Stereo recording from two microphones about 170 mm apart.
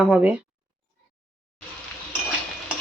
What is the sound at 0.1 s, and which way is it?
Speech, 10° right (ahead or behind).